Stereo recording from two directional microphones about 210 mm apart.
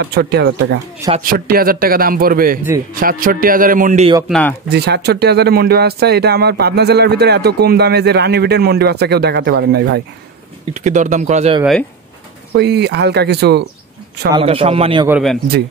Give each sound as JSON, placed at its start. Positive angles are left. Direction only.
{"t": 0.0, "sound": "a man's voice", "side_deg": -50}
{"t": 4.3, "sound": "speech", "side_deg": 5}
{"t": 4.6, "sound": "speech", "side_deg": -50}
{"t": 10.7, "sound": "a man's voice", "side_deg": -35}
{"t": 12.5, "sound": "speech", "side_deg": -55}
{"t": 14.3, "sound": "speech", "side_deg": -25}
{"t": 15.0, "sound": "speech", "side_deg": -5}